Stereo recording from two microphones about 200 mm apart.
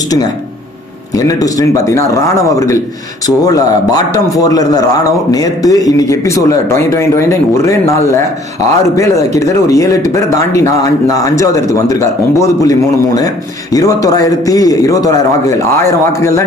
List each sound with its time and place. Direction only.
1.1 s a man's voice: 20° left (ahead or behind)